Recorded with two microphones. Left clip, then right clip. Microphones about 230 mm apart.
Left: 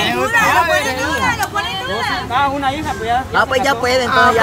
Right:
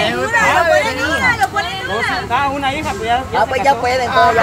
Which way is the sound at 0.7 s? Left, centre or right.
Left.